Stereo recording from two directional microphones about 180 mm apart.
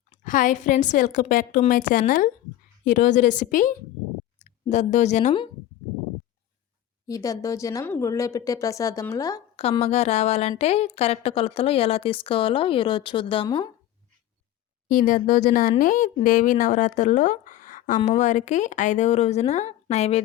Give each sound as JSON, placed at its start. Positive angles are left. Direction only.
{"t": 0.1, "sound": "speech", "side_deg": 45}
{"t": 7.1, "sound": "speech", "side_deg": 20}
{"t": 9.6, "sound": "speech", "side_deg": 35}
{"t": 14.8, "sound": "speech", "side_deg": 45}